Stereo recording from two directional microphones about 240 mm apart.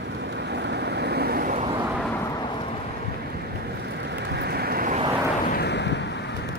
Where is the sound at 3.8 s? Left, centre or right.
Right.